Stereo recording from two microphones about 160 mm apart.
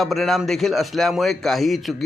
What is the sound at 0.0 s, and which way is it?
Speech, centre (ahead or behind).